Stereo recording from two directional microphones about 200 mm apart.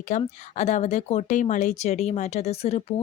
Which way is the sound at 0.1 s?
35° left (ahead or behind).